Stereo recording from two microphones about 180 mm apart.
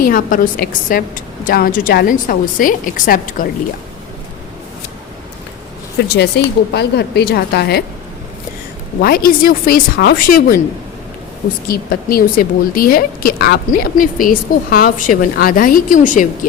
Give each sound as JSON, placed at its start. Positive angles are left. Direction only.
{"t": 0.0, "sound": "a woman's voice", "side_deg": 50}
{"t": 6.0, "sound": "a woman's voice", "side_deg": 65}
{"t": 9.0, "sound": "a woman's voice", "side_deg": 55}
{"t": 11.7, "sound": "a woman's voice", "side_deg": 55}